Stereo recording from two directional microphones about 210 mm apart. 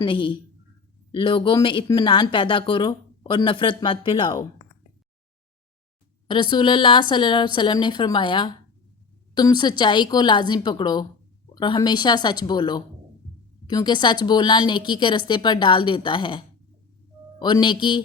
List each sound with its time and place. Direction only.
0.0 s speech: 25° left (ahead or behind)
6.2 s speech: 20° left (ahead or behind)
17.4 s speech: 20° left (ahead or behind)